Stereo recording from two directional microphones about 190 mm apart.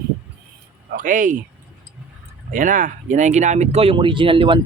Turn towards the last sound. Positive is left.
turn(degrees=-25)  # may be behind; listen again after turning